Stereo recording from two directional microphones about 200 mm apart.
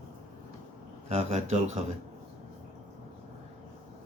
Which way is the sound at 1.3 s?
35° right (ahead or behind).